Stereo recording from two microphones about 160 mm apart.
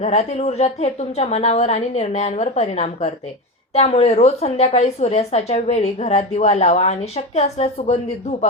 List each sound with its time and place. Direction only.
0.0 s a woman's voice: 45° left (ahead or behind)